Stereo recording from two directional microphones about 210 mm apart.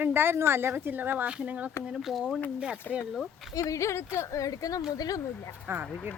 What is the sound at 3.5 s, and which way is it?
Speech, 15° left (ahead or behind).